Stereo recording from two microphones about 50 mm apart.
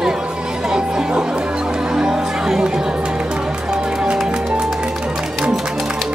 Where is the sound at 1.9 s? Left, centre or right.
Centre.